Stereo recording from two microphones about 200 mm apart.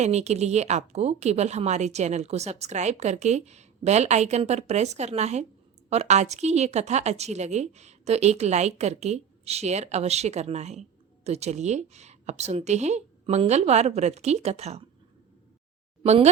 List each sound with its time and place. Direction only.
0.0 s a woman's voice: 35° right (ahead or behind)
16.0 s a woman's voice: 35° right (ahead or behind)